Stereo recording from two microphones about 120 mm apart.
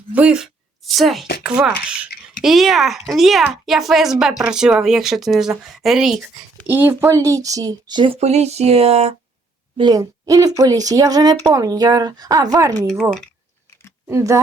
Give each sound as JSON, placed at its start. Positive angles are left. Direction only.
{"t": 0.1, "sound": "speech", "side_deg": -10}
{"t": 6.7, "sound": "speech", "side_deg": -15}
{"t": 8.1, "sound": "speech", "side_deg": -65}
{"t": 9.7, "sound": "speech", "side_deg": -35}
{"t": 12.9, "sound": "speech", "side_deg": 5}
{"t": 14.1, "sound": "speech", "side_deg": -25}